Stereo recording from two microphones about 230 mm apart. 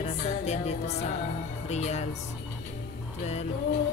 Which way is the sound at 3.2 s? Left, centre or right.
Left.